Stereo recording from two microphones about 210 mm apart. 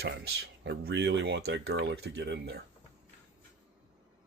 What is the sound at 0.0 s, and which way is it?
Speech, 50° right (ahead or behind).